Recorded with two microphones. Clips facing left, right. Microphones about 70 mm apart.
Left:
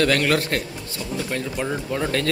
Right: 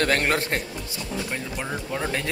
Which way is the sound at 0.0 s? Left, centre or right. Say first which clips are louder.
Left 3 dB; right.